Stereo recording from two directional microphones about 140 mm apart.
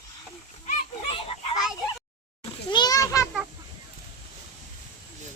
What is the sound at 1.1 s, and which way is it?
Children playing, 45° left (ahead or behind).